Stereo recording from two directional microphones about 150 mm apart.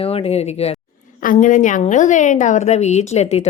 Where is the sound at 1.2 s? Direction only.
60° left (ahead or behind).